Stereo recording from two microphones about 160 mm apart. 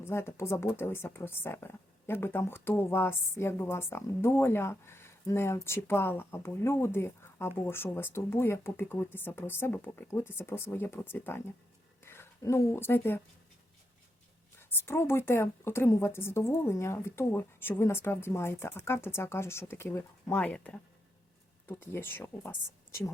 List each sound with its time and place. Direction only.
0.0 s speech: 15° left (ahead or behind)
14.6 s speech: 15° left (ahead or behind)